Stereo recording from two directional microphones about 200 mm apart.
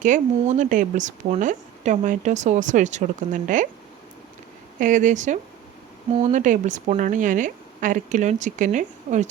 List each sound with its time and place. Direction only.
0.0 s speech: 40° right (ahead or behind)
4.8 s speech: 40° right (ahead or behind)